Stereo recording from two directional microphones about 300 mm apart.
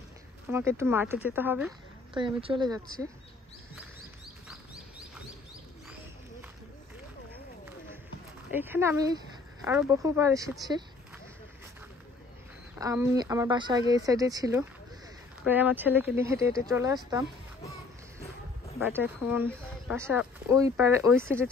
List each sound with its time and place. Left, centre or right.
0.5 s speech: centre
8.5 s speech: centre
12.7 s speech: centre
19.3 s speech: centre